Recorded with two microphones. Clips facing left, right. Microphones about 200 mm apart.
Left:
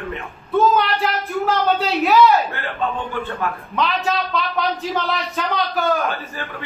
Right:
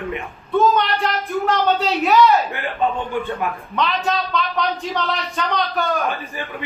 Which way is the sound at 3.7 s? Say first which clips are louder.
Even; centre (ahead or behind).